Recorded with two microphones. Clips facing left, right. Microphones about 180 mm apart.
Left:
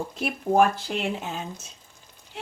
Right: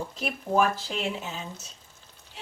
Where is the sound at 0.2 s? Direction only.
55° left (ahead or behind).